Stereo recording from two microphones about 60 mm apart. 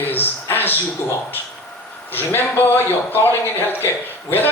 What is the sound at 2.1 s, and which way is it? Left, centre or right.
A man's voice, left.